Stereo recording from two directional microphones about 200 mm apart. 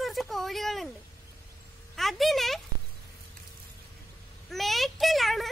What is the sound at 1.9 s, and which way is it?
Speech, centre (ahead or behind).